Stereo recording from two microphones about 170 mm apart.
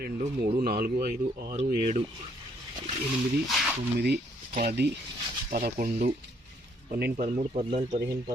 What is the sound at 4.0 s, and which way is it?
Speech, 70° right (ahead or behind).